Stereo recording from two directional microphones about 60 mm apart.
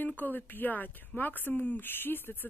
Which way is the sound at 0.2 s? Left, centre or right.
Left.